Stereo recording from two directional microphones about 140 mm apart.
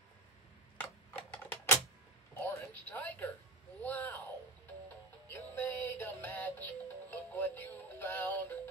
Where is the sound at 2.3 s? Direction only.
15° left (ahead or behind).